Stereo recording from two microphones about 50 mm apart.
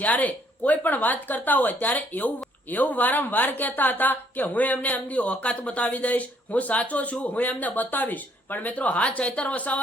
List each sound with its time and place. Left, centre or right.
0.0 s speech: left